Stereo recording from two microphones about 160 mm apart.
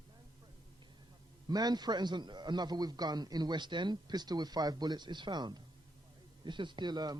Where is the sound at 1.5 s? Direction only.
25° right (ahead or behind).